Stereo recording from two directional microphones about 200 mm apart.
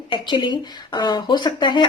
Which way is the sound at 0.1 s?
25° left (ahead or behind).